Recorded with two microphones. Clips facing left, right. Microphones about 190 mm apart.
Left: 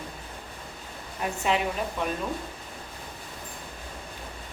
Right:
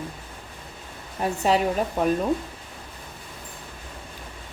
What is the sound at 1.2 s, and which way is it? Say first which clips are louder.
Speech: right 5 dB; 40° right (ahead or behind).